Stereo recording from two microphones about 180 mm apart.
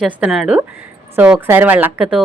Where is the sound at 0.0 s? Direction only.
Centre (ahead or behind).